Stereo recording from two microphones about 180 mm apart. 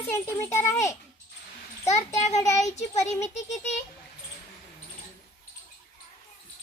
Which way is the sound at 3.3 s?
40° left (ahead or behind).